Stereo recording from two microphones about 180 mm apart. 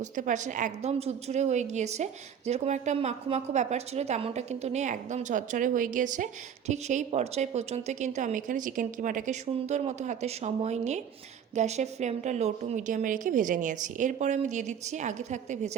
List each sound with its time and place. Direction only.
0.0 s a woman's voice: 45° right (ahead or behind)